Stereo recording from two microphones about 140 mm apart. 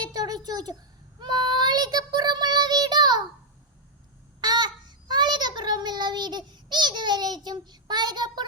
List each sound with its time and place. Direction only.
0.0 s a sound: 30° right (ahead or behind)
1.2 s child singing: 30° right (ahead or behind)
4.4 s child singing: 30° right (ahead or behind)